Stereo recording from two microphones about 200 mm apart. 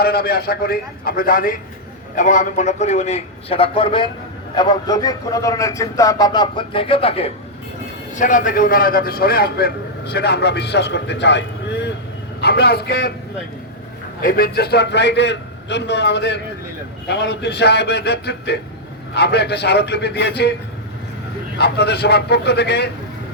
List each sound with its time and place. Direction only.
0.0 s a man's voice: 50° left (ahead or behind); by 7.3 s 30° left (ahead or behind)
8.1 s a man's voice: 40° left (ahead or behind)
14.2 s a man's voice: 45° left (ahead or behind)
21.6 s a man's voice: 55° left (ahead or behind)